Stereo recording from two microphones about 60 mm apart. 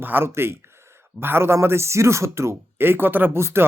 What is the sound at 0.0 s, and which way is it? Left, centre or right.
Speech, right.